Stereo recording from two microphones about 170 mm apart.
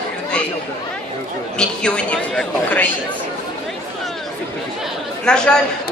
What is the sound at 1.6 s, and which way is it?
A man's voice, 5° left (ahead or behind).